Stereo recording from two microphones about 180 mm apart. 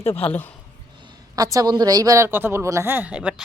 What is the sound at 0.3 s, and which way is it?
Speech, 10° left (ahead or behind).